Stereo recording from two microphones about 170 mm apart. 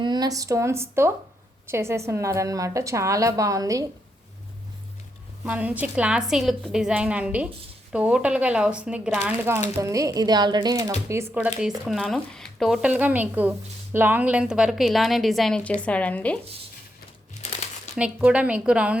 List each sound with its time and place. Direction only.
0.0 s a woman's voice: 25° right (ahead or behind)
5.5 s a woman's voice: 10° right (ahead or behind); by 16.4 s 10° left (ahead or behind)
17.4 s crumpling: 40° left (ahead or behind)
17.9 s a woman's voice: 5° right (ahead or behind)